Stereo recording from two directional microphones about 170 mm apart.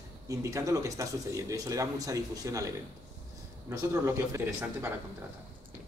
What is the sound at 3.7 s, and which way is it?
Speech, 20° right (ahead or behind).